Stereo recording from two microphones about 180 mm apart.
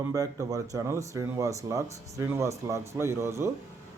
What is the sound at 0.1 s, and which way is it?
Speech, 20° right (ahead or behind).